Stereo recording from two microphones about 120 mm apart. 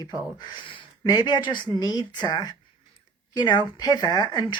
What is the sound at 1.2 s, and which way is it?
Speech, 35° left (ahead or behind).